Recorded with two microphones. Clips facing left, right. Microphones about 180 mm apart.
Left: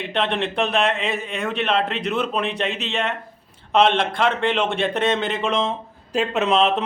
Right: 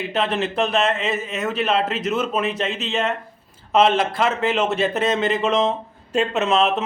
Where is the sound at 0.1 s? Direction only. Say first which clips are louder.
Left 1 dB; 5° right (ahead or behind).